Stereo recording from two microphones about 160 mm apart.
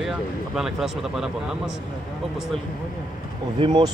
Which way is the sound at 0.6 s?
5° right (ahead or behind).